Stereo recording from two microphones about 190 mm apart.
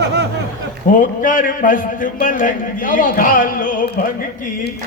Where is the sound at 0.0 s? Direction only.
65° right (ahead or behind).